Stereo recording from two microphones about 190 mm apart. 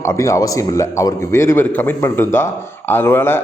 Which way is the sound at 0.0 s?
15° left (ahead or behind).